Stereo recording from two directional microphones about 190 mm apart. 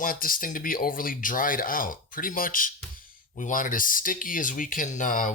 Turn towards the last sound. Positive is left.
turn(degrees=45)  # may be behind; listen again after turning